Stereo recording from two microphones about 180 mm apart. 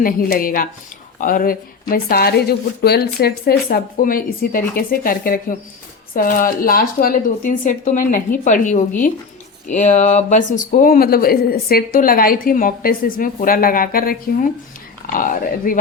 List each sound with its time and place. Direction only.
0.0 s a woman's voice: 55° left (ahead or behind)